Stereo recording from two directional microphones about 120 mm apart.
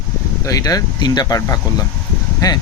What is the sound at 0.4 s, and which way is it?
Speech, 30° left (ahead or behind).